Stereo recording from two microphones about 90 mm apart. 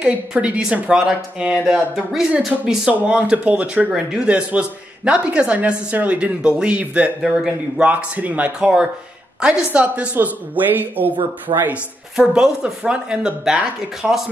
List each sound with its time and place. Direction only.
0.0 s a man's voice: 10° right (ahead or behind)
7.8 s speech: 15° right (ahead or behind)